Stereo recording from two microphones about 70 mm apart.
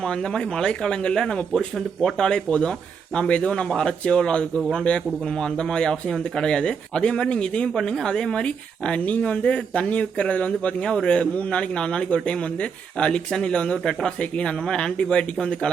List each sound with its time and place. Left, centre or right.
0.0 s speech: centre